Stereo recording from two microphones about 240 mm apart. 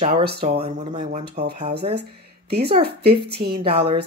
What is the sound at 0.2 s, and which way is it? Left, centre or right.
Speech, right.